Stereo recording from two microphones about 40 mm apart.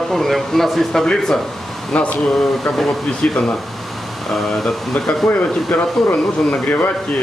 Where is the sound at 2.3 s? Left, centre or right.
Centre.